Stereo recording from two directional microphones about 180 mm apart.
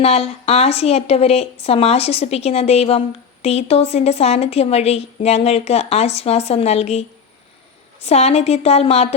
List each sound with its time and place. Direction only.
0.0 s a woman's voice: 35° left (ahead or behind)
8.0 s a woman's voice: 35° left (ahead or behind)